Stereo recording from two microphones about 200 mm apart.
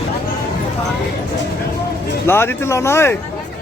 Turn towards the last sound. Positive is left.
turn(degrees=15)  # may be behind; listen again after turning